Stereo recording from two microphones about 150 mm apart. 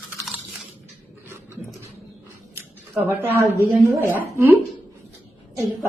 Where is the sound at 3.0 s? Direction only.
15° right (ahead or behind).